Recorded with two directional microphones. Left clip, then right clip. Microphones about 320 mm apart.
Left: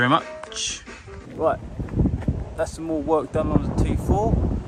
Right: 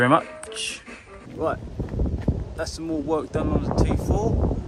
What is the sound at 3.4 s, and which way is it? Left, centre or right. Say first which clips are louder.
Speech: left 1 dB; centre.